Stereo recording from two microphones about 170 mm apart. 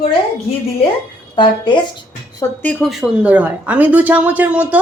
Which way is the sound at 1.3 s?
30° left (ahead or behind).